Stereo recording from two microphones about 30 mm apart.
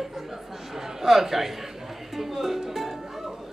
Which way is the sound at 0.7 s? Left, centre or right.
Centre.